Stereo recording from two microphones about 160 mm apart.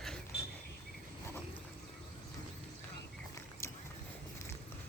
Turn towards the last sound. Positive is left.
turn(degrees=15)  # may be behind; listen again after turning